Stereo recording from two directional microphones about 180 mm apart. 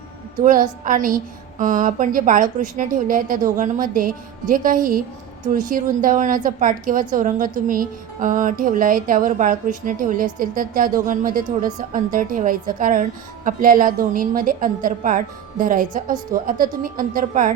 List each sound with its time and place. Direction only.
0.4 s a woman's voice: 50° right (ahead or behind)